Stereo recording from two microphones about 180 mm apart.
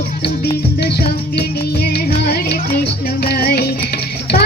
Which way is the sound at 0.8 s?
65° left (ahead or behind).